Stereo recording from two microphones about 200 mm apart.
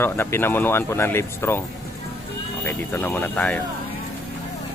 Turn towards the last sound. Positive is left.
turn(degrees=5)  # may be behind; listen again after turning